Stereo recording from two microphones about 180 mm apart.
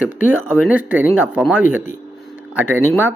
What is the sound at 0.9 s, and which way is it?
Speech, 10° right (ahead or behind).